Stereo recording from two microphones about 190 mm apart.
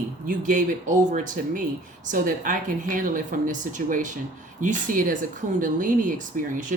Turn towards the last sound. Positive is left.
turn(degrees=-45)  # may be behind; listen again after turning